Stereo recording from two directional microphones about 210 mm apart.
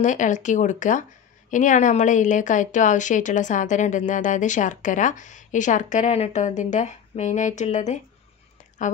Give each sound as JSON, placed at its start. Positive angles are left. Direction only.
{"t": 0.0, "sound": "a woman's voice", "side_deg": 35}